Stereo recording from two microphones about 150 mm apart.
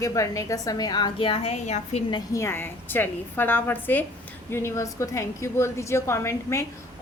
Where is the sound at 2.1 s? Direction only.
20° left (ahead or behind).